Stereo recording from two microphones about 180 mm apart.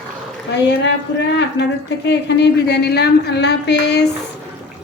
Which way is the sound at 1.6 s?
70° left (ahead or behind).